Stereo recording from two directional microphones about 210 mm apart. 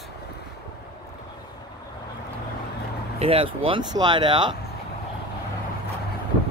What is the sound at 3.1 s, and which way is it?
Speech, 25° right (ahead or behind).